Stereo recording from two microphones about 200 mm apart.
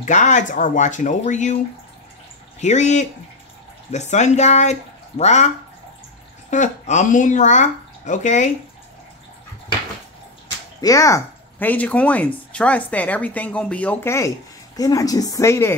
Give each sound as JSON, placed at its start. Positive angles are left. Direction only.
{"t": 0.0, "sound": "speech", "side_deg": 35}
{"t": 2.6, "sound": "speech", "side_deg": 35}
{"t": 6.5, "sound": "speech", "side_deg": 35}
{"t": 10.8, "sound": "speech", "side_deg": 15}